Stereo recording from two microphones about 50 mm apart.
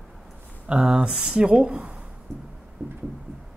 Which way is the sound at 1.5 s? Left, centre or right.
Right.